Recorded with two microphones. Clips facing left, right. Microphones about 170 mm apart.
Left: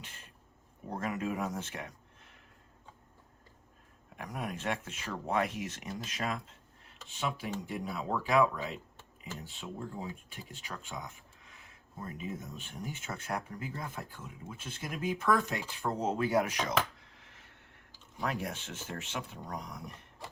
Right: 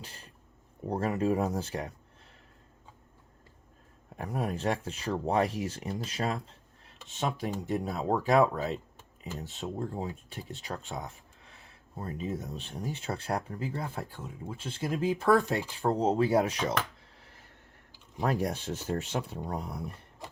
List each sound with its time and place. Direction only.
0.0 s speech: 35° right (ahead or behind)
4.2 s speech: 30° right (ahead or behind)
17.2 s a sound: 35° right (ahead or behind)
18.2 s speech: 40° right (ahead or behind)